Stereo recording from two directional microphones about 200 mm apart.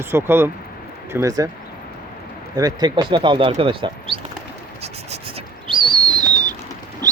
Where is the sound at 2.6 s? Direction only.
20° right (ahead or behind).